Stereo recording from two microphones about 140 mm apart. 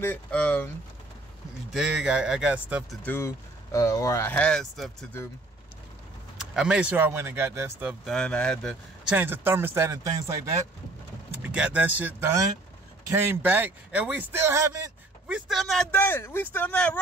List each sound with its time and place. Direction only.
0.0 s speech: 15° left (ahead or behind)
1.7 s speech: 5° right (ahead or behind)
3.1 s speech: 20° left (ahead or behind); by 4.9 s centre (ahead or behind)
6.5 s a man's voice: 5° right (ahead or behind)
8.0 s speech: 5° left (ahead or behind)
9.0 s a man's voice: 15° right (ahead or behind)
11.4 s a man's voice: 10° right (ahead or behind)
15.2 s speech: 5° right (ahead or behind)
15.9 s speech: 15° left (ahead or behind)